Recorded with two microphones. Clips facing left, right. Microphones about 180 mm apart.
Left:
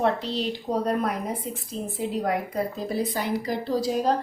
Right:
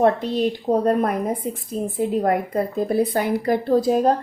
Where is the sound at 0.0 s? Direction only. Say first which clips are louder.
Right 7 dB; 50° right (ahead or behind).